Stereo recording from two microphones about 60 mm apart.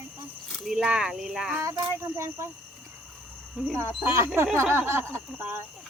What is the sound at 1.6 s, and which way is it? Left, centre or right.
Child singing, right.